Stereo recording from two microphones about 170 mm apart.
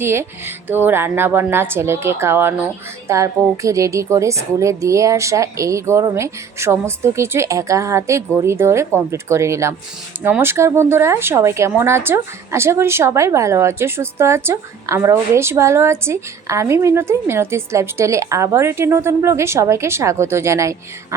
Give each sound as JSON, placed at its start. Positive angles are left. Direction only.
{"t": 0.0, "sound": "speech", "side_deg": -15}